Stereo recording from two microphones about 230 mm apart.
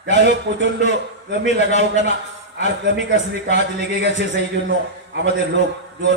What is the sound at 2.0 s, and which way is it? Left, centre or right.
A man's voice, right.